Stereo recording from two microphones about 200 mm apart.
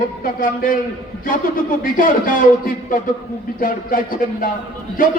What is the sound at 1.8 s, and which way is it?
Speech, 45° left (ahead or behind).